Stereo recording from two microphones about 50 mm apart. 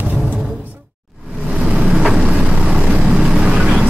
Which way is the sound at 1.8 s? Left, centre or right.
Centre.